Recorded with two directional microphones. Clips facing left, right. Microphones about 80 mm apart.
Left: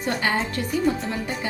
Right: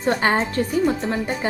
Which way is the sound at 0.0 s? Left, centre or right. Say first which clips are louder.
Right 5 dB; right.